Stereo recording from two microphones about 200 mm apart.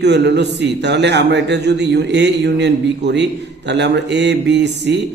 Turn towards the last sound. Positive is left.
turn(degrees=-60)  # may be behind; listen again after turning